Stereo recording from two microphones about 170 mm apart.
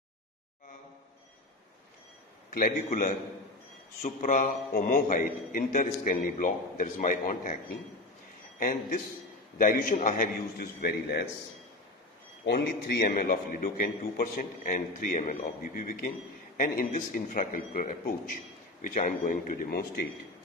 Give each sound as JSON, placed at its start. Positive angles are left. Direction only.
{"t": 2.5, "sound": "a man's voice", "side_deg": 50}
{"t": 9.6, "sound": "a man's voice", "side_deg": 50}
{"t": 12.4, "sound": "a man's voice", "side_deg": 70}